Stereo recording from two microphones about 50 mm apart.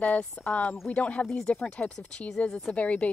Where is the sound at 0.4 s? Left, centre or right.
Left.